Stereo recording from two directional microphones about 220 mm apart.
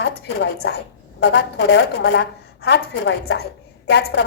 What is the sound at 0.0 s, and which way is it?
A woman's voice, 50° left (ahead or behind).